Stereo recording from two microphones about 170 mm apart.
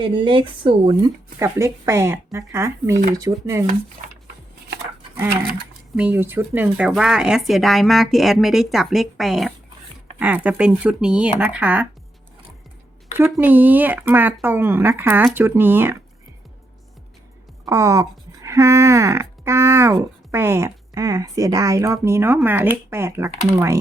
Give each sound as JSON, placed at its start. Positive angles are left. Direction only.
{"t": 0.0, "sound": "speech", "side_deg": -30}
{"t": 6.0, "sound": "speech", "side_deg": -10}
{"t": 13.3, "sound": "speech", "side_deg": -10}
{"t": 17.7, "sound": "speech", "side_deg": -20}